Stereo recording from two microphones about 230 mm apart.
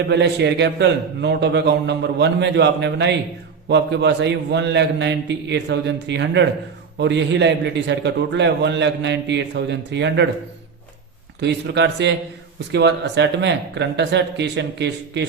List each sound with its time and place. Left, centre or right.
0.1 s a man's voice: right
11.3 s a man's voice: right